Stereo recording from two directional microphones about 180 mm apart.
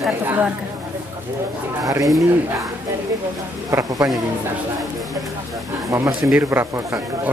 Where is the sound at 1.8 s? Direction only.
20° right (ahead or behind).